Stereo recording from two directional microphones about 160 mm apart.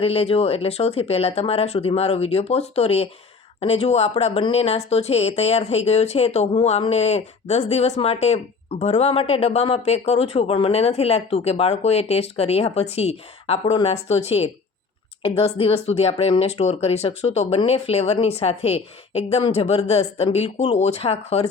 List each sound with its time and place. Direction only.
0.0 s speech: 40° left (ahead or behind)